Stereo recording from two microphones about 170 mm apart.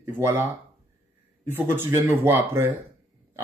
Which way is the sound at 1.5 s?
15° right (ahead or behind).